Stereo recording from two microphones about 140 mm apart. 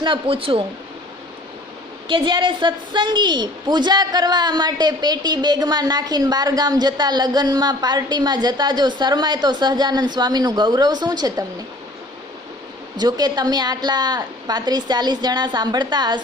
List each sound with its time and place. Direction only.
0.0 s speech: 40° right (ahead or behind)
2.0 s a woman's voice: 35° right (ahead or behind)
13.0 s a woman's voice: 30° right (ahead or behind)